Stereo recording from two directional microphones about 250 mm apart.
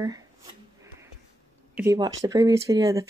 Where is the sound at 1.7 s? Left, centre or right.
Centre.